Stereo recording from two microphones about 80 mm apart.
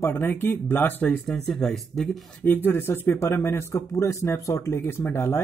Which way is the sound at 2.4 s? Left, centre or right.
Left.